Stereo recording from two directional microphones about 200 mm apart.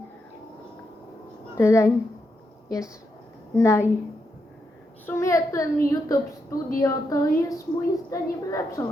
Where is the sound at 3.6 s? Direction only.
15° left (ahead or behind).